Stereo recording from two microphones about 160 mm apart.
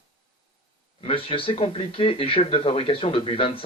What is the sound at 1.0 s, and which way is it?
Speech, 35° left (ahead or behind).